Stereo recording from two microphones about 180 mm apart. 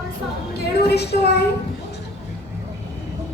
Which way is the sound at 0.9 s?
65° left (ahead or behind).